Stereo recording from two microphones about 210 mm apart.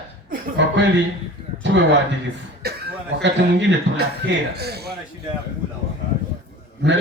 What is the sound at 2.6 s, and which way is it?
Speech, 55° right (ahead or behind).